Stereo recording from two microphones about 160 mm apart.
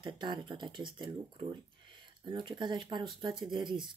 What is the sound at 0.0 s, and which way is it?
Speech, 30° right (ahead or behind).